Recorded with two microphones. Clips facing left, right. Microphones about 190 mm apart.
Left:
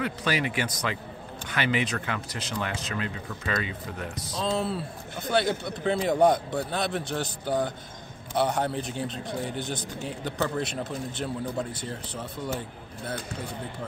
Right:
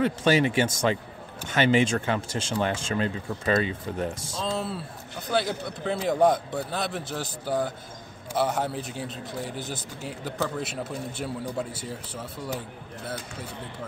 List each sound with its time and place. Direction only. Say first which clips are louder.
0.0 s speech: right 6 dB; 25° right (ahead or behind)
4.4 s a man's voice: left 3 dB; centre (ahead or behind)